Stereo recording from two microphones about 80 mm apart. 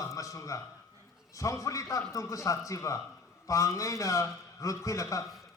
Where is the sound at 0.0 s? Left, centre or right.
Left.